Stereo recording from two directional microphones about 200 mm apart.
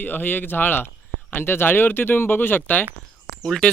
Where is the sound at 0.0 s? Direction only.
10° left (ahead or behind).